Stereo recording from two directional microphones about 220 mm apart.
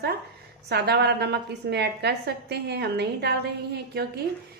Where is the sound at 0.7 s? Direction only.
50° right (ahead or behind).